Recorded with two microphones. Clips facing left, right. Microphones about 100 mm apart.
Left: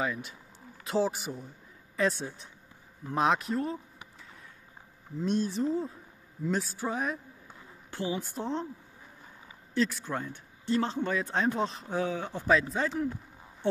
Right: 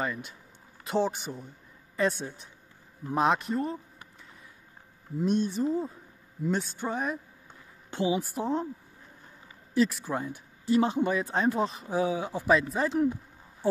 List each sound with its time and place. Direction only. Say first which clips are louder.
0.0 s speech: even; centre (ahead or behind)
5.2 s a man's voice: right 2 dB; centre (ahead or behind)
7.9 s speech: right 5 dB; 15° right (ahead or behind)
9.8 s speech: right 3 dB; 5° right (ahead or behind)
11.1 s speech: right 2 dB; 5° right (ahead or behind)
12.9 s speech: right 6 dB; 20° right (ahead or behind)